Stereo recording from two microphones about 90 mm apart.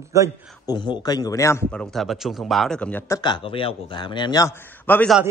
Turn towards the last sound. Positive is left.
turn(degrees=20)  # may be behind; listen again after turning